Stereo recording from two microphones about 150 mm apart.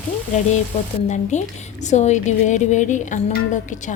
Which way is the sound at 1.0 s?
50° left (ahead or behind).